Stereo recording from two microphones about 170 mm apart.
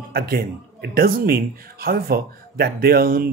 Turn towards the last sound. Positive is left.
turn(degrees=-60)  # may be behind; listen again after turning